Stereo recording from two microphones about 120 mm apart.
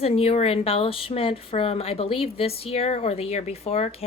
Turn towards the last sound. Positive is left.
turn(degrees=60)  # may be behind; listen again after turning